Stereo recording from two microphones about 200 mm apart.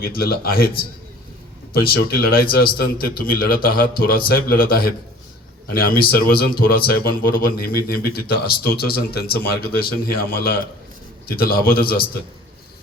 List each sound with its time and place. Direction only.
0.0 s speech: 50° left (ahead or behind)